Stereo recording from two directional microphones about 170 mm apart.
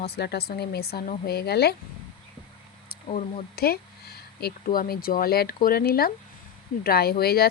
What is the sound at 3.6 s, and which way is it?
Speech, 65° left (ahead or behind).